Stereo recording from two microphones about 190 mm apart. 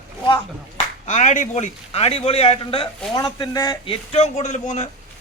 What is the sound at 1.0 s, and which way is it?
A man's voice, 40° left (ahead or behind).